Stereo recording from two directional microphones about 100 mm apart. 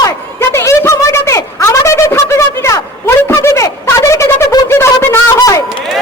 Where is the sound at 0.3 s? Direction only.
25° left (ahead or behind).